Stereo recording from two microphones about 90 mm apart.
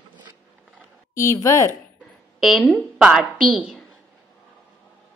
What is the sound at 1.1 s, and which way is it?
Speech, 35° left (ahead or behind).